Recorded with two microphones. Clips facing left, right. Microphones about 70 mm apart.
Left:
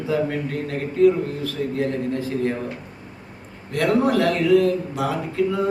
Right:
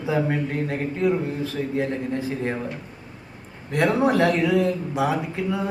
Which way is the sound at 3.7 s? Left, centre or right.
Centre.